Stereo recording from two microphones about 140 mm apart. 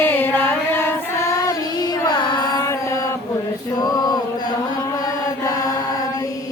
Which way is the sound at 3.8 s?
25° left (ahead or behind).